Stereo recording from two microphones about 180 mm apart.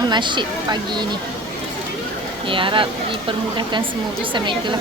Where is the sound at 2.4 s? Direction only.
30° right (ahead or behind).